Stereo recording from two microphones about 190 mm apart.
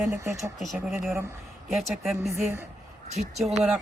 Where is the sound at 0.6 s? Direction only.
Centre (ahead or behind).